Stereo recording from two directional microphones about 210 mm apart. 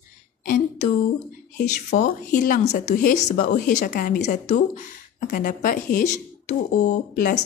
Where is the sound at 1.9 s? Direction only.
40° left (ahead or behind).